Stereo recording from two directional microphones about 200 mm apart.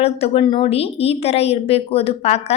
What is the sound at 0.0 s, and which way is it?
A woman's voice, 30° left (ahead or behind).